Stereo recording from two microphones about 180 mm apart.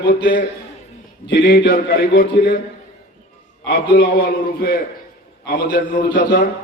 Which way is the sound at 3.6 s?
60° left (ahead or behind).